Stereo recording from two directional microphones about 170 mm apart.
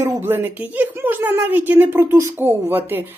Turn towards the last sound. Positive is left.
turn(degrees=-10)  # may be behind; listen again after turning